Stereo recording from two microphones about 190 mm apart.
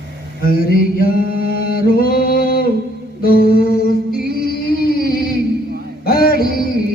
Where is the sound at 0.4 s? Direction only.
50° left (ahead or behind).